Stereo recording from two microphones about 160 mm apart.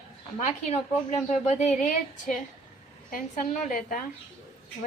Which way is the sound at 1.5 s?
45° left (ahead or behind).